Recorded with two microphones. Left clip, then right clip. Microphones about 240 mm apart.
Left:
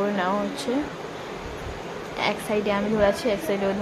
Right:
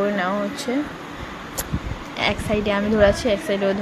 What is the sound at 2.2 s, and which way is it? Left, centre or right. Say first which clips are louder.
A woman's voice: right 3 dB; centre.